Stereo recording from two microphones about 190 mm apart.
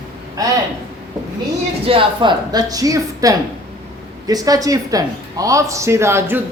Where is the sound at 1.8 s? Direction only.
30° right (ahead or behind).